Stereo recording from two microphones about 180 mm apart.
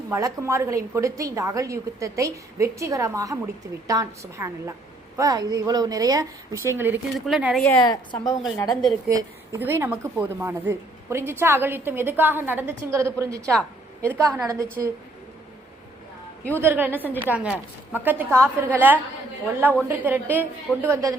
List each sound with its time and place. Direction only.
0.1 s speech: 15° right (ahead or behind)
7.9 s a woman's voice: 20° left (ahead or behind)
9.0 s speech: 15° right (ahead or behind)
16.6 s speech: 10° right (ahead or behind)